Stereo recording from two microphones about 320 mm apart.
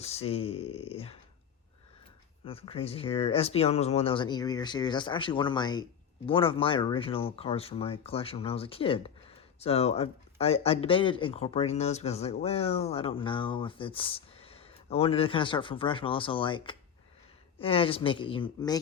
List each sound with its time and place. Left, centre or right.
0.0 s speech: centre
2.4 s speech: centre